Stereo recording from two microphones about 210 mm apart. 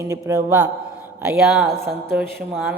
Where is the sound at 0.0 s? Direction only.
15° right (ahead or behind).